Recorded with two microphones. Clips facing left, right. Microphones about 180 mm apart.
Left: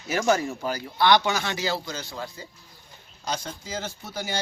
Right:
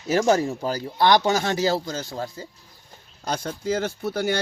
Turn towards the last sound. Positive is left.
turn(degrees=-60)  # may be behind; listen again after turning